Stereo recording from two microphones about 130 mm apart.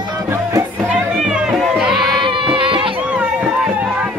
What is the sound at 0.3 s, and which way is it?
Music, 25° right (ahead or behind).